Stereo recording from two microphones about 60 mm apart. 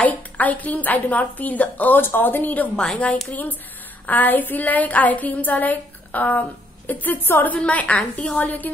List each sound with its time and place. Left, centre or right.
0.0 s a woman's voice: left
2.7 s a woman's voice: centre
3.3 s a woman's voice: left
7.5 s a woman's voice: left